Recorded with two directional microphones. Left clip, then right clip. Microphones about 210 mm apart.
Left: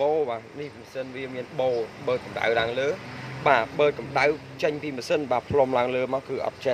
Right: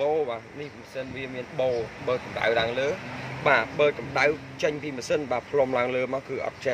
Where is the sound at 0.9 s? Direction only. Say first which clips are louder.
Left 1 dB; 5° left (ahead or behind).